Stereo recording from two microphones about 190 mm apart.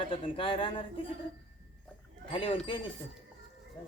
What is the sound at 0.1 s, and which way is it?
Speech, 30° left (ahead or behind).